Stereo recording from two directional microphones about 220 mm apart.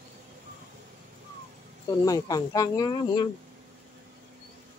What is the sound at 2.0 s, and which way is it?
Speech, 15° left (ahead or behind).